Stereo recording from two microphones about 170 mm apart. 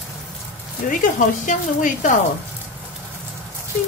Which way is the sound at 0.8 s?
50° left (ahead or behind).